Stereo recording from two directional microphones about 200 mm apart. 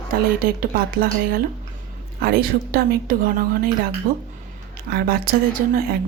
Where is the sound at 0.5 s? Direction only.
50° right (ahead or behind).